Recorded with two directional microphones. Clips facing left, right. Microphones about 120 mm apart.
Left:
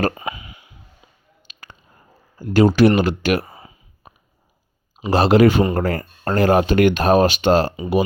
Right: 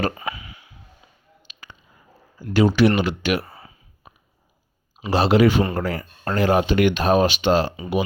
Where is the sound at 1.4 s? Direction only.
45° left (ahead or behind).